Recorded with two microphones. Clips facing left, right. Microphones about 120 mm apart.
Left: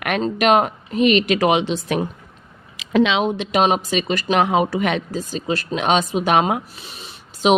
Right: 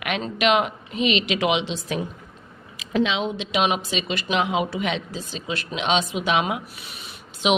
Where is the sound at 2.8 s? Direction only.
85° left.